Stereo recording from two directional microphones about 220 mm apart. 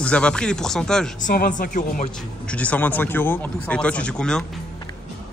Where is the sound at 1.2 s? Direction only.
35° left (ahead or behind).